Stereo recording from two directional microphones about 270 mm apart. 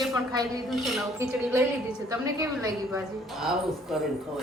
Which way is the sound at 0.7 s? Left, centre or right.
Centre.